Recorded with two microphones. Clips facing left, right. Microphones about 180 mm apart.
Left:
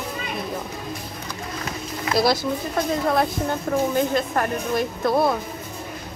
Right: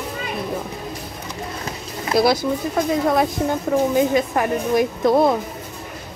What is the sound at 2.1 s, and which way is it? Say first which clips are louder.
Speech: right 3 dB; 50° right (ahead or behind).